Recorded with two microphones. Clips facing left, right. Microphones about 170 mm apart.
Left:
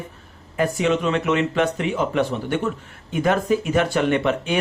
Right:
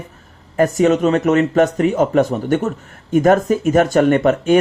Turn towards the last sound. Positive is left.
turn(degrees=-45)  # may be behind; listen again after turning